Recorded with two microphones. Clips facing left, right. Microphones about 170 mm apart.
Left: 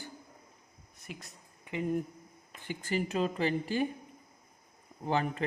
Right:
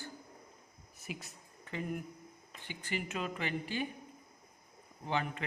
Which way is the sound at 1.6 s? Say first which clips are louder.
Left 5 dB; 20° left (ahead or behind).